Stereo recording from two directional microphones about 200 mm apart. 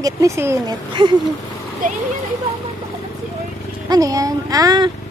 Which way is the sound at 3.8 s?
20° right (ahead or behind).